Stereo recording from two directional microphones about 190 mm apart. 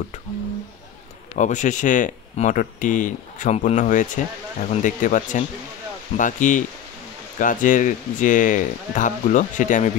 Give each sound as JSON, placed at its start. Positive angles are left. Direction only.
{"t": 1.3, "sound": "speech", "side_deg": 40}